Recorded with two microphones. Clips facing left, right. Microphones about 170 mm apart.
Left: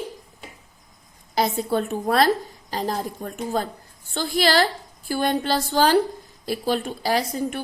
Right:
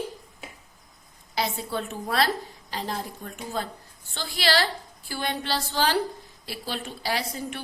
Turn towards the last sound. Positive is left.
turn(degrees=45)  # may be behind; listen again after turning